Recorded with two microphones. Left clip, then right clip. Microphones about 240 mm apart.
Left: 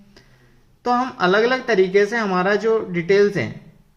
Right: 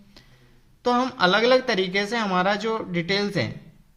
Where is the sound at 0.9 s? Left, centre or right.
Right.